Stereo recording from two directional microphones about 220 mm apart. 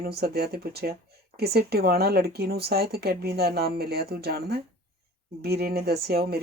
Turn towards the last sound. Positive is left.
turn(degrees=-45)  # may be behind; listen again after turning